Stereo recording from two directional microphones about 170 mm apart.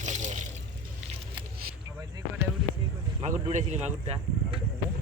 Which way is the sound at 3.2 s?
45° right (ahead or behind).